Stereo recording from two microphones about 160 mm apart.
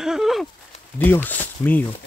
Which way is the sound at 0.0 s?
5° right (ahead or behind).